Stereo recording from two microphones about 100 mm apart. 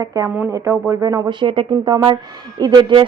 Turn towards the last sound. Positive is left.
turn(degrees=-50)  # may be behind; listen again after turning